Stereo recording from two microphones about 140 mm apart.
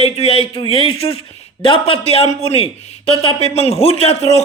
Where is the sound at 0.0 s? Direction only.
45° left (ahead or behind).